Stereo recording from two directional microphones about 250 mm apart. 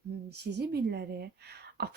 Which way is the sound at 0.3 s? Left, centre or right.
Right.